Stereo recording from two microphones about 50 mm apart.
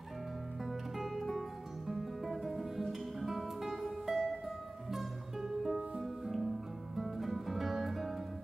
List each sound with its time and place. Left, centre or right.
0.7 s music: centre